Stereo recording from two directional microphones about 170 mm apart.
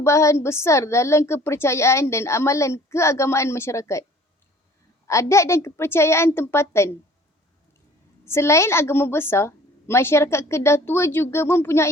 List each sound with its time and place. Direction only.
0.0 s a woman's voice: 15° left (ahead or behind)
5.0 s a woman's voice: 15° left (ahead or behind)
8.3 s a woman's voice: 15° left (ahead or behind)